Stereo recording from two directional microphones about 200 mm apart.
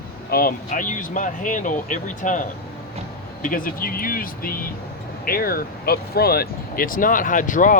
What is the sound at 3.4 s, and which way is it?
Speech, 45° left (ahead or behind).